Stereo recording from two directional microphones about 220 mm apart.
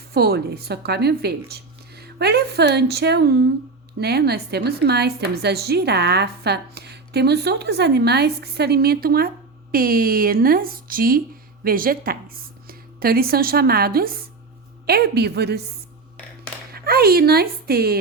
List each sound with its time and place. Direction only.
0.1 s a woman's voice: 45° right (ahead or behind)
16.7 s speech: 45° right (ahead or behind)